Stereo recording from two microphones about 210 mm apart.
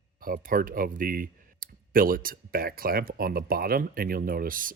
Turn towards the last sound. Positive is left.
turn(degrees=-40)  # may be behind; listen again after turning